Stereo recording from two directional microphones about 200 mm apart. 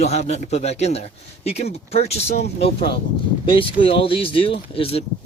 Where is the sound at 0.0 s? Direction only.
35° left (ahead or behind).